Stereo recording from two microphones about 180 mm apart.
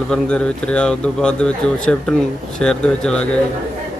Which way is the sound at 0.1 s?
5° left (ahead or behind).